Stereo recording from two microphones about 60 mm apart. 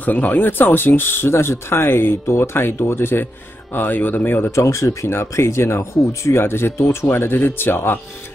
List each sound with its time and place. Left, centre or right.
0.0 s speech: left
4.5 s speech: left
5.1 s speech: left